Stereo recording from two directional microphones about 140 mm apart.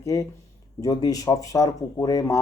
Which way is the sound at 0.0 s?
25° left (ahead or behind).